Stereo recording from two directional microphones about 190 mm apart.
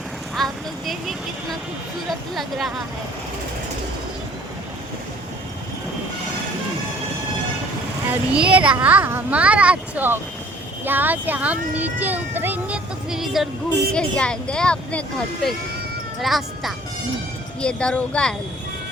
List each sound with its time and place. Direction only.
0.3 s vehicle: centre (ahead or behind)
2.3 s speech: centre (ahead or behind)
8.1 s speech: 5° right (ahead or behind)